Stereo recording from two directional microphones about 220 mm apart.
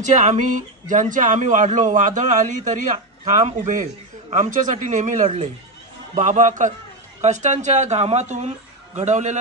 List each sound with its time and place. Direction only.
0.0 s speech: 35° right (ahead or behind)